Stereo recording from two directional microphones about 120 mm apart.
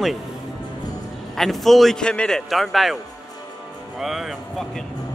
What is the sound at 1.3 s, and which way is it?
A man's voice, centre (ahead or behind).